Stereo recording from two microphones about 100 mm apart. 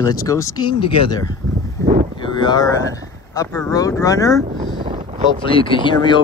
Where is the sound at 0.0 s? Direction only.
35° left (ahead or behind).